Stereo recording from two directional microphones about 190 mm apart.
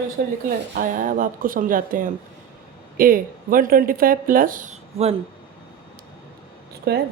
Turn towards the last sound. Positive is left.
turn(degrees=-60)  # may be behind; listen again after turning